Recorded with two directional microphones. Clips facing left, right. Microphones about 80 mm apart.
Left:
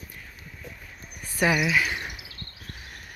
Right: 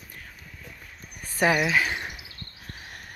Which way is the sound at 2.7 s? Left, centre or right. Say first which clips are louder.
Right 3 dB; right.